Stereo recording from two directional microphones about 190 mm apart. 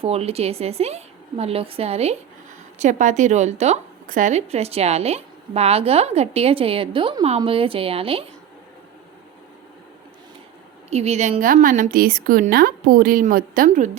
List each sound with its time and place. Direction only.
0.0 s a woman's voice: 30° right (ahead or behind)
10.8 s a woman's voice: 35° right (ahead or behind)